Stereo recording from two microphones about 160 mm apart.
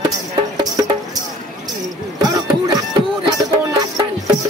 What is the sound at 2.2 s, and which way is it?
Music, 25° right (ahead or behind).